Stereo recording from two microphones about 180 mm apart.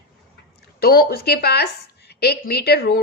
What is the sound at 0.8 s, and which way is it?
A woman's voice, 60° left (ahead or behind).